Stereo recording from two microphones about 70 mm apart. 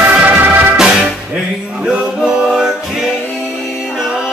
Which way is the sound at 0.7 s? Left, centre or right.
Centre.